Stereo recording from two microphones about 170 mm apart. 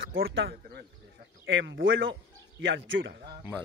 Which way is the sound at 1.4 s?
90° right.